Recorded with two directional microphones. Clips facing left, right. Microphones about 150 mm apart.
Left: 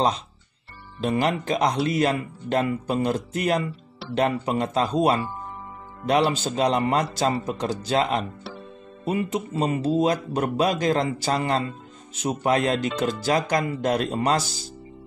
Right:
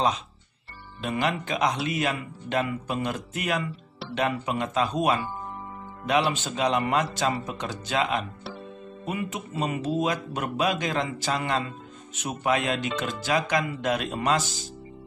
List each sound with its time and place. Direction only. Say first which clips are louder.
1.0 s speech: left 4 dB; 35° left (ahead or behind)